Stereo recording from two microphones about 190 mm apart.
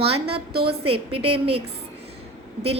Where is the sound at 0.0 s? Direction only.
30° right (ahead or behind).